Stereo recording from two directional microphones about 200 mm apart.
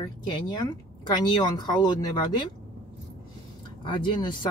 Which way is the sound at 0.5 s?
20° left (ahead or behind).